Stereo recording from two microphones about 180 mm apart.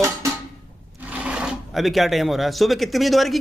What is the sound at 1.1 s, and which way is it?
Speech, 5° right (ahead or behind).